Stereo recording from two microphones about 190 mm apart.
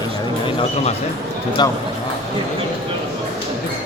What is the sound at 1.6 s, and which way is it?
Speech, 25° left (ahead or behind).